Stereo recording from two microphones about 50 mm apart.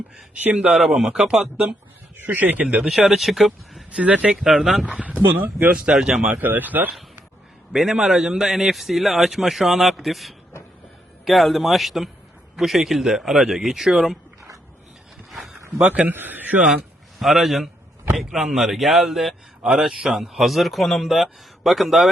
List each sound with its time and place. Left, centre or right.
0.7 s speech: centre
2.1 s speech: right
2.8 s a man's voice: centre
3.9 s speech: right
4.4 s a man's voice: centre
5.3 s speech: right
5.7 s speech: centre
6.4 s speech: right
7.7 s a man's voice: centre
15.3 s a sound: centre
15.9 s a man's voice: right
17.2 s a man's voice: centre